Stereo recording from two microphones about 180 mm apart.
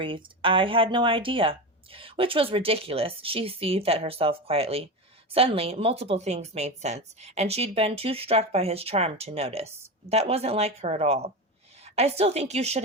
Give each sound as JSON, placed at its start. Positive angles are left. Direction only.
{"t": 0.0, "sound": "speech", "side_deg": -30}